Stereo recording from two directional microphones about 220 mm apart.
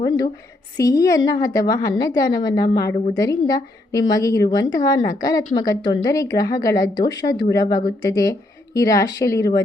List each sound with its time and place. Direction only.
0.8 s speech: 15° left (ahead or behind)